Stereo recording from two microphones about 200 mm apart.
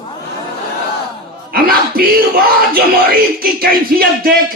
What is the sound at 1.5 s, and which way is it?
A man's voice, 45° right (ahead or behind).